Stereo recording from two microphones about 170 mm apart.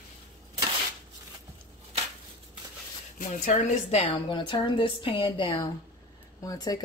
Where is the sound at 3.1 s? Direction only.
50° left (ahead or behind).